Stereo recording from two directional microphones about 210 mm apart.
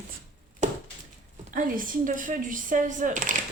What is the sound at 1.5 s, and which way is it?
A woman's voice, 40° right (ahead or behind).